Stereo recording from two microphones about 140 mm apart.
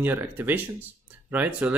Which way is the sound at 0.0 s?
15° right (ahead or behind).